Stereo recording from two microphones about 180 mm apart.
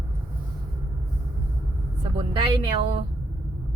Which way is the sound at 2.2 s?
30° right (ahead or behind).